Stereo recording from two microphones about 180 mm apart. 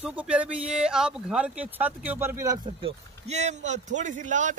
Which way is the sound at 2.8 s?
40° right (ahead or behind).